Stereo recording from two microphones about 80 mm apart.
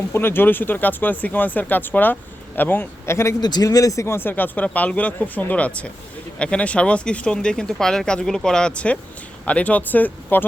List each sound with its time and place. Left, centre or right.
0.1 s speech: left
3.4 s speech: left